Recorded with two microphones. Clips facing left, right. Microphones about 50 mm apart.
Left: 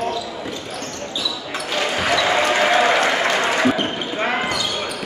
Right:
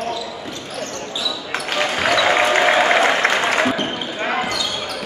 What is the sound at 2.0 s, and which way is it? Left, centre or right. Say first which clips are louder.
Applause: right 2 dB; centre.